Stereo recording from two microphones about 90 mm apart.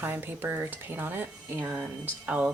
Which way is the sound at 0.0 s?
20° right (ahead or behind).